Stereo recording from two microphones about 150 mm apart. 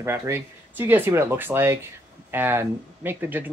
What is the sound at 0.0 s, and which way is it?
Speech, 15° right (ahead or behind).